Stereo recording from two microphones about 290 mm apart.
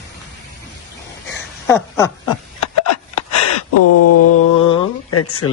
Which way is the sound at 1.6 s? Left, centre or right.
Centre.